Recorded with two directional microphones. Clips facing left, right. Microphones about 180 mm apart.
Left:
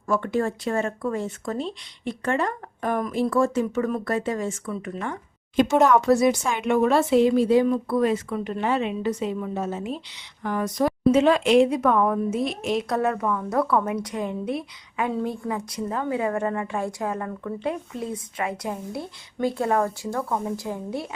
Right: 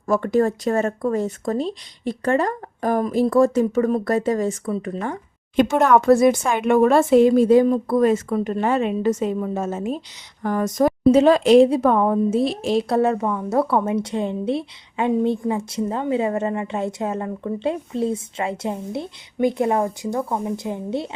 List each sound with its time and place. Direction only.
0.1 s speech: 40° right (ahead or behind)
5.8 s a woman's voice: 55° right (ahead or behind); by 21.1 s 25° right (ahead or behind)